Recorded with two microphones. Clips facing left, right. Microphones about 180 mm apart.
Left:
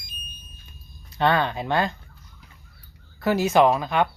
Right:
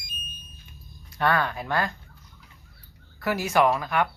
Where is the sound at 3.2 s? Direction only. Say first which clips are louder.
Left 4 dB; 25° left (ahead or behind).